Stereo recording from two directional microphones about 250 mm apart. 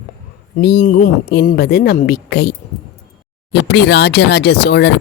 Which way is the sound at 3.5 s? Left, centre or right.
Left.